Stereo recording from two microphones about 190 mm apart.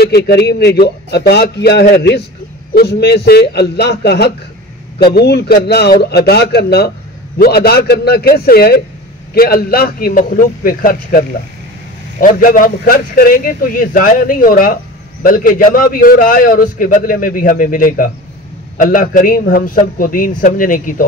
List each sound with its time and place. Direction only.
0.0 s a man's voice: 60° left (ahead or behind)
12.4 s a man's voice: 45° left (ahead or behind)